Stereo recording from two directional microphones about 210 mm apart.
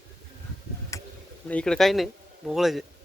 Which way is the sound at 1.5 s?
5° left (ahead or behind).